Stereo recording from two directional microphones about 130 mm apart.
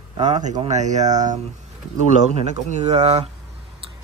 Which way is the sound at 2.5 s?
60° right (ahead or behind).